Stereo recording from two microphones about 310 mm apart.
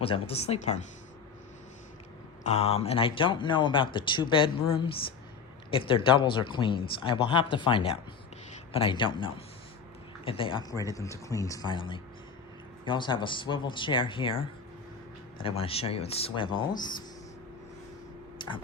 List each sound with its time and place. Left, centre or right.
0.0 s speech: centre
2.4 s speech: left
18.3 s a sound: centre